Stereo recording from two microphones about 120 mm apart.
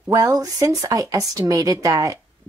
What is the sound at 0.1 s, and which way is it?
Speech, 30° right (ahead or behind).